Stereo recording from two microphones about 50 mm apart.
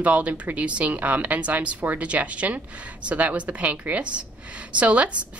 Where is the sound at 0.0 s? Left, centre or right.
Right.